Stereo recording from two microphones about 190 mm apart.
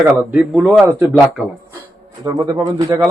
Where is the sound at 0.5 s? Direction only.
5° right (ahead or behind).